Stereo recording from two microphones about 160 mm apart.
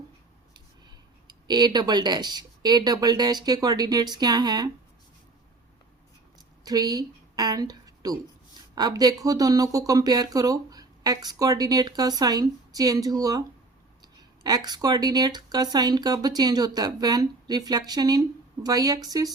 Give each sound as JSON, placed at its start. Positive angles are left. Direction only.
{"t": 1.3, "sound": "speech", "side_deg": -25}
{"t": 6.7, "sound": "speech", "side_deg": -25}
{"t": 14.4, "sound": "speech", "side_deg": -25}